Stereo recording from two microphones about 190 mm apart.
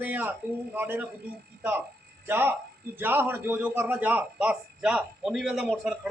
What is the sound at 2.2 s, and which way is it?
A man's voice, 10° right (ahead or behind).